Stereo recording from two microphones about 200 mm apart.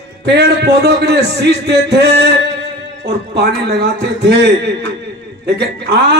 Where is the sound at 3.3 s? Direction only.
55° right (ahead or behind).